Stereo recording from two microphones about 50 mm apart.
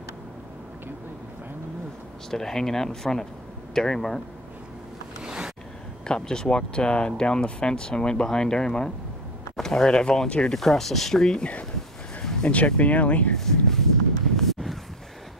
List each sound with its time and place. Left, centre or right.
2.3 s speech: centre
5.2 s vehicle: centre
6.0 s speech: centre
10.5 s speech: centre
12.2 s a sound: centre
12.4 s speech: left
13.4 s a sound: centre